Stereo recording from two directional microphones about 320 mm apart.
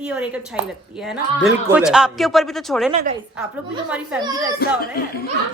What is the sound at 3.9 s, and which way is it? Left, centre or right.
Speech, centre.